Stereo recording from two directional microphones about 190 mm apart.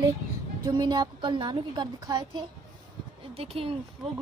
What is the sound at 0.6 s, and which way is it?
A woman's voice, 20° right (ahead or behind).